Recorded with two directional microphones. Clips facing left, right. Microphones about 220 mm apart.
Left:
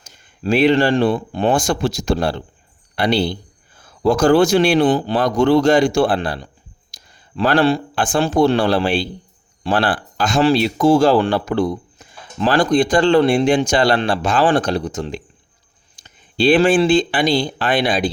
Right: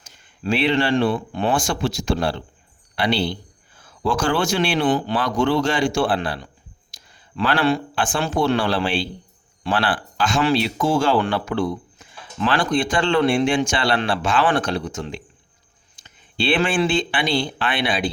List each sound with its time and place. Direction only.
0.0 s a man's voice: 40° left (ahead or behind)